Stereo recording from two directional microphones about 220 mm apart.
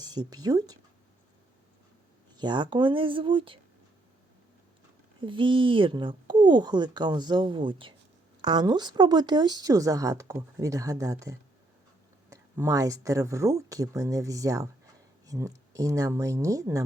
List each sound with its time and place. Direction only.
0.0 s speech: 20° right (ahead or behind)
2.3 s speech: 20° right (ahead or behind)
5.2 s speech: 20° right (ahead or behind)